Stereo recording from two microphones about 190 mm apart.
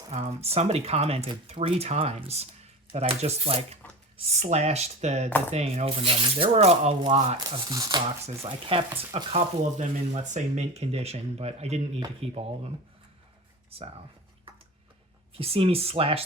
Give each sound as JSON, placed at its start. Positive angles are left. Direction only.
{"t": 0.1, "sound": "speech", "side_deg": -35}
{"t": 7.3, "sound": "speech", "side_deg": -20}
{"t": 13.7, "sound": "speech", "side_deg": -30}
{"t": 15.4, "sound": "speech", "side_deg": -30}